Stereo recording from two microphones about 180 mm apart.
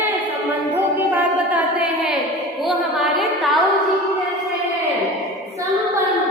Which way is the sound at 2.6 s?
Centre (ahead or behind).